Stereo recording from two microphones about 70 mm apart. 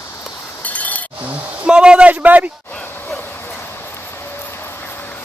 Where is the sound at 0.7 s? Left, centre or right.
Left.